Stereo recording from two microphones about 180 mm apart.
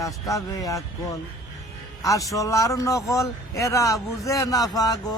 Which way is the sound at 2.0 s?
20° left (ahead or behind).